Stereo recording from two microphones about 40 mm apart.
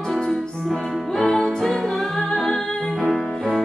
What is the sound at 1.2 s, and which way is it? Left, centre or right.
Music, centre.